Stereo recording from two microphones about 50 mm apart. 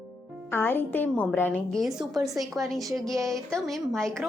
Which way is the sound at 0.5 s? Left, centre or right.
Left.